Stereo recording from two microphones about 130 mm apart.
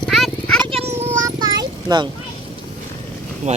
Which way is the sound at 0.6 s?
50° right (ahead or behind).